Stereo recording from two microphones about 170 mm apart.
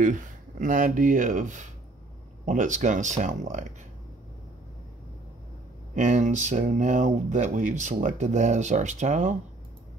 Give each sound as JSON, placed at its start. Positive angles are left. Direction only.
{"t": 0.0, "sound": "speech", "side_deg": -50}
{"t": 5.9, "sound": "speech", "side_deg": -45}